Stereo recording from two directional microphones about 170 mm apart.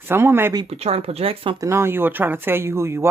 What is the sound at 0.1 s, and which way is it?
Speech, 15° right (ahead or behind).